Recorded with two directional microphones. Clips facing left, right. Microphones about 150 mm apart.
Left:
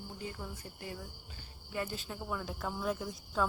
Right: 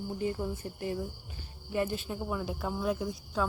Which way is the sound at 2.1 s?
15° right (ahead or behind).